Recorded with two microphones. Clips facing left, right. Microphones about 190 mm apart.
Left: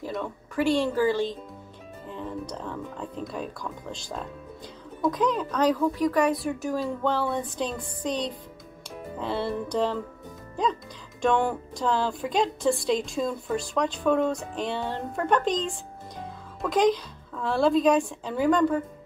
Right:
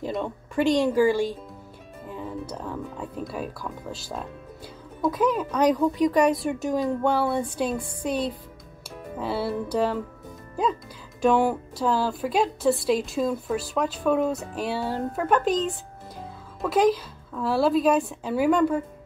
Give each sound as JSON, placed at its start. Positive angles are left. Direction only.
{"t": 0.0, "sound": "speech", "side_deg": -20}